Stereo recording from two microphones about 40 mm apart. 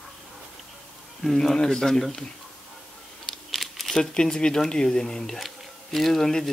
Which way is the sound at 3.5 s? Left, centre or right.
Centre.